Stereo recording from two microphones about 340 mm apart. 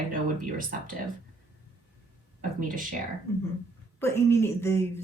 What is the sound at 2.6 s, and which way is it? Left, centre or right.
Speech, right.